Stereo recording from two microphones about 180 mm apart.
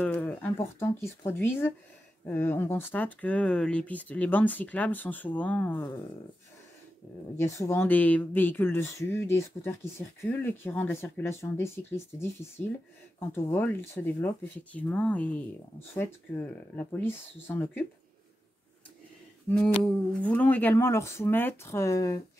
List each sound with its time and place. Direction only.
0.0 s speech: 10° left (ahead or behind)
7.3 s speech: 15° left (ahead or behind)
19.8 s speech: 5° left (ahead or behind)